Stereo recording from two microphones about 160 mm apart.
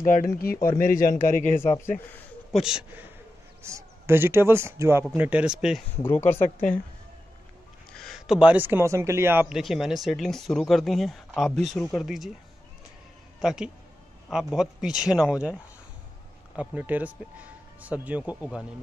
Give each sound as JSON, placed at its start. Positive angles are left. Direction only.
{"t": 0.0, "sound": "speech", "side_deg": 60}
{"t": 2.5, "sound": "speech", "side_deg": -5}
{"t": 3.6, "sound": "speech", "side_deg": -15}
{"t": 6.0, "sound": "speech", "side_deg": 15}
{"t": 7.9, "sound": "a man's voice", "side_deg": 0}
{"t": 9.5, "sound": "speech", "side_deg": 0}
{"t": 13.4, "sound": "speech", "side_deg": -5}
{"t": 16.5, "sound": "speech", "side_deg": -10}